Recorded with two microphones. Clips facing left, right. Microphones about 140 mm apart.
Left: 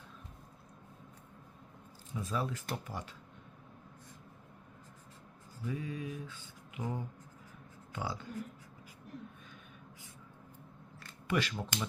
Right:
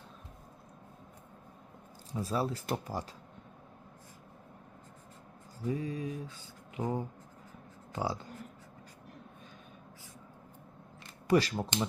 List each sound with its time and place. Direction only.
2.1 s mantra: 35° right (ahead or behind)
5.6 s mantra: 35° right (ahead or behind)
11.3 s mantra: 35° right (ahead or behind)